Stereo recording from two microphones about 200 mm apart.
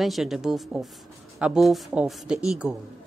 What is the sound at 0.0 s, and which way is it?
A woman's voice, centre (ahead or behind).